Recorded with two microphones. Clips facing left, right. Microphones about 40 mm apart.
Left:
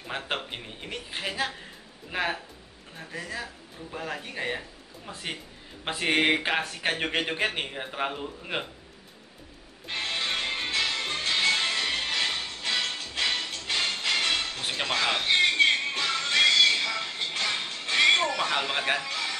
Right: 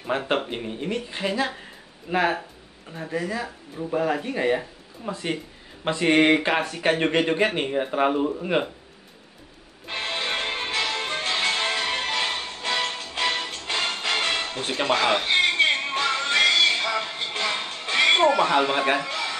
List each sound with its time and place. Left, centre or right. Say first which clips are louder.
0.5 s speech: right 9 dB; centre
5.1 s speech: right 7 dB; centre
9.8 s music: right 2 dB; centre
14.6 s speech: right 5 dB; centre
15.6 s music: right 2 dB; centre
18.9 s a sound: right 4 dB; centre